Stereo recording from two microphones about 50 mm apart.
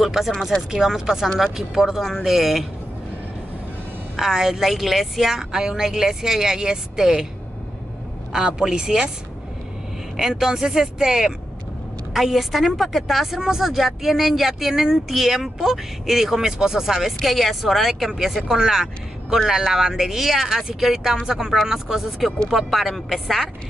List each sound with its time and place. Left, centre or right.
0.0 s a woman's voice: centre
0.7 s a woman's voice: centre
4.2 s a woman's voice: centre
8.3 s a woman's voice: centre
10.1 s a woman's voice: centre